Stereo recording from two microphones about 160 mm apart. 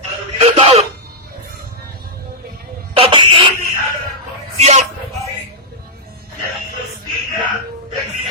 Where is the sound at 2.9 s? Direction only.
35° right (ahead or behind).